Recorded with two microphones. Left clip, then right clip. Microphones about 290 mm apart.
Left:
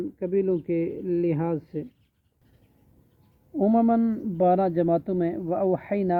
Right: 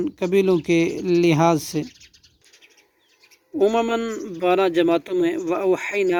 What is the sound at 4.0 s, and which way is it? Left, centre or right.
Speech, centre.